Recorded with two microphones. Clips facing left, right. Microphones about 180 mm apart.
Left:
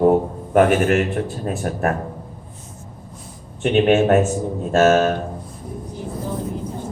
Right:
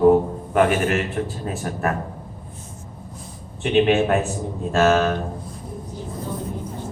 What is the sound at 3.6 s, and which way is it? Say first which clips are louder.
A man's voice: left 2 dB; 45° left (ahead or behind).